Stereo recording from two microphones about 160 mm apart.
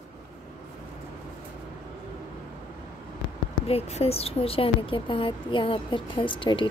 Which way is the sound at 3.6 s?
40° left (ahead or behind).